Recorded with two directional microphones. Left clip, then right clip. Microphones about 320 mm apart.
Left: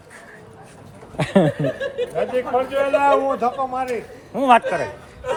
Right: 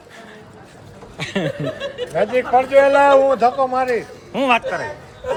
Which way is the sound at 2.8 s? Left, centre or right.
Right.